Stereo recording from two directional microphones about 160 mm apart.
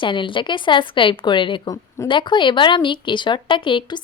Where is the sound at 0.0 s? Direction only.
30° left (ahead or behind).